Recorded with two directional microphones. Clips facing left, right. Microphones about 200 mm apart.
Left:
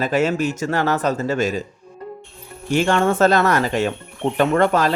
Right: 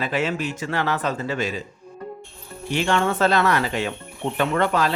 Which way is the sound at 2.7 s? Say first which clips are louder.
Left 4 dB; 45° left (ahead or behind).